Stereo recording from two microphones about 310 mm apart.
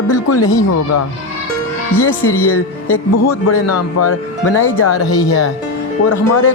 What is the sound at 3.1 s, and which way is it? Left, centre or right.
Speech, left.